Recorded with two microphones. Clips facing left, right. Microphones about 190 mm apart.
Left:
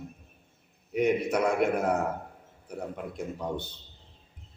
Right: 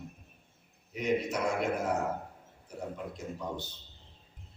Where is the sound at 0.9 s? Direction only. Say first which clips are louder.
Left 5 dB; 60° left (ahead or behind).